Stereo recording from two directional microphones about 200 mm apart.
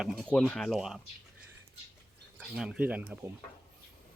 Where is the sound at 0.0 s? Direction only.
Centre (ahead or behind).